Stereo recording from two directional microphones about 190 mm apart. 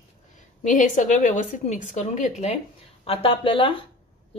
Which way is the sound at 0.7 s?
40° left (ahead or behind).